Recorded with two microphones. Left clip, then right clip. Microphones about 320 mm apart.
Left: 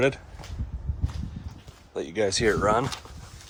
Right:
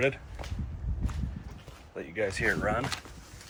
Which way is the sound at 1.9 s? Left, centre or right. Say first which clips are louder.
Left 5 dB; centre.